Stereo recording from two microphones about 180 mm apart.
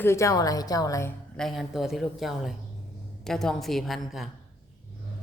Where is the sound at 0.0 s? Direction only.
15° left (ahead or behind).